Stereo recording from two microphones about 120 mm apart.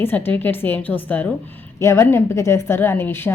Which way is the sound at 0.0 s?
15° left (ahead or behind).